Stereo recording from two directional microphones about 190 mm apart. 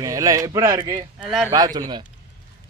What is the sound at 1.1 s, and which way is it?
Speech, centre (ahead or behind).